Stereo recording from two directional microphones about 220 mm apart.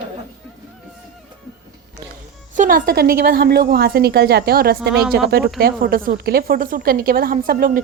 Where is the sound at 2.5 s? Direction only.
35° right (ahead or behind).